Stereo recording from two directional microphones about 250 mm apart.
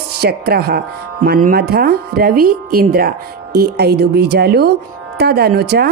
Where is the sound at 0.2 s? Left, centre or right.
Right.